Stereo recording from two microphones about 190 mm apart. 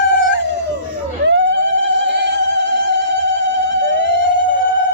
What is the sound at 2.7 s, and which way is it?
Music, 70° right (ahead or behind).